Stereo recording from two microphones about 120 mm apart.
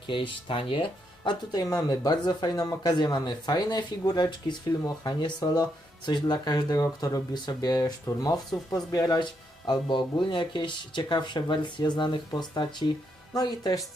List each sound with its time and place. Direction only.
0.1 s speech: 45° left (ahead or behind)